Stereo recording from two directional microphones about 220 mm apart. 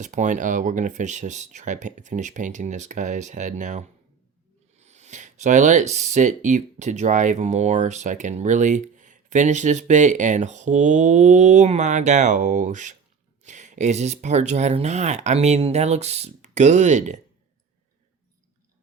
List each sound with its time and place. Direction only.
0.0 s speech: 35° right (ahead or behind)